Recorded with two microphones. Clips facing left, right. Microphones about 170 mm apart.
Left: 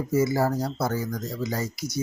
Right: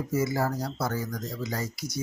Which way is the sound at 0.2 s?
30° left (ahead or behind).